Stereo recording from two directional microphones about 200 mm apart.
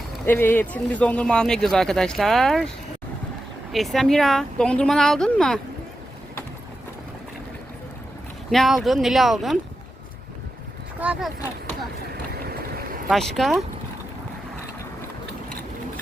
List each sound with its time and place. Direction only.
0.3 s speech: 10° left (ahead or behind)
3.7 s speech: centre (ahead or behind)
8.4 s speech: centre (ahead or behind)
11.0 s speech: 5° right (ahead or behind)
12.1 s boat: 50° right (ahead or behind)
13.1 s speech: centre (ahead or behind)